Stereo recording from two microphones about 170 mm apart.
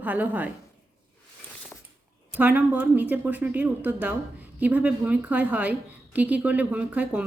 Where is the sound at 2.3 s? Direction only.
10° right (ahead or behind).